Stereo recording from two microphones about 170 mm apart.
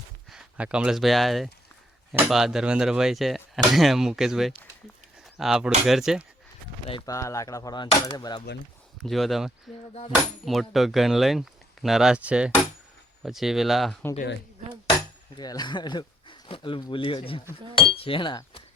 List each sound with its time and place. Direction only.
0.3 s speech: 5° right (ahead or behind)
7.0 s speech: 20° left (ahead or behind)
9.0 s speech: centre (ahead or behind)
15.4 s speech: 25° left (ahead or behind)
17.7 s chink: 30° left (ahead or behind)